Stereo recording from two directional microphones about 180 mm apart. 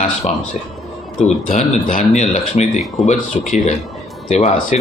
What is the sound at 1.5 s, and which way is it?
Speech, 45° left (ahead or behind).